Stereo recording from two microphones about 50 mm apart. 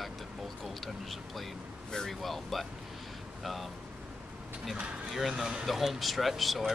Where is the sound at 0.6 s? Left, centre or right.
Centre.